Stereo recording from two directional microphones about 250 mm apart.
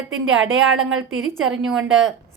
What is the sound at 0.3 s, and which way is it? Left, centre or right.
A woman's voice, right.